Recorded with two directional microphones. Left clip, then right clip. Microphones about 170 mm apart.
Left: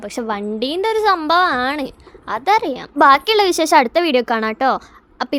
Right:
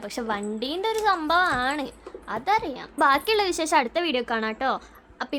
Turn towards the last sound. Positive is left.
turn(degrees=35)  # may be behind; listen again after turning